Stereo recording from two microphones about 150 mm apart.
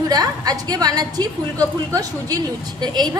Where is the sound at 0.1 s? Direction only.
25° right (ahead or behind).